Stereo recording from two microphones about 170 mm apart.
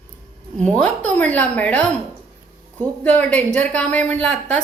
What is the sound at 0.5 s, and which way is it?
A woman's voice, 5° left (ahead or behind).